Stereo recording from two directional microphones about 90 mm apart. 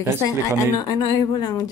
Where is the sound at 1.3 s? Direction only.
50° left (ahead or behind).